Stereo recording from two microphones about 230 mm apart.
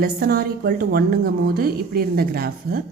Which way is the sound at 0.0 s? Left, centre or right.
Right.